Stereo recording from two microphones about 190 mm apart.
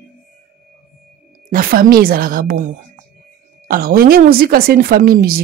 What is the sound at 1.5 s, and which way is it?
Speech, 50° right (ahead or behind).